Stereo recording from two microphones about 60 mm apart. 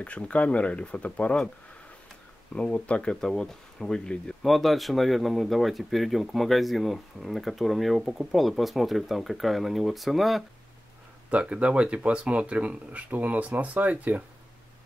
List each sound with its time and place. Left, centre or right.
0.0 s speech: left
2.5 s speech: centre
4.4 s speech: centre
11.2 s speech: centre